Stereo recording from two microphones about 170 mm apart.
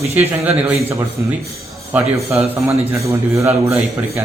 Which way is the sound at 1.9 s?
15° right (ahead or behind).